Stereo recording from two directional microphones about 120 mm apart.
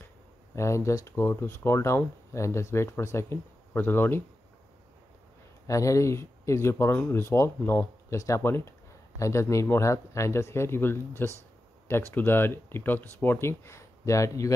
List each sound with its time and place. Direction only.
0.6 s speech: 25° left (ahead or behind)
5.7 s speech: 25° left (ahead or behind)